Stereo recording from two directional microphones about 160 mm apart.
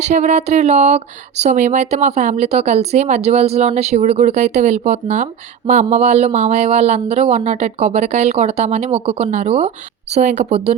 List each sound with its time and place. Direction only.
0.0 s speech: 45° right (ahead or behind)